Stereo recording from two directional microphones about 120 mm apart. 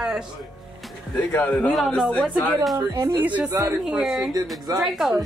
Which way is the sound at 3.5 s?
25° right (ahead or behind).